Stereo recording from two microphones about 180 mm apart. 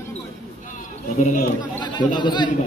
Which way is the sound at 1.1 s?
45° left (ahead or behind).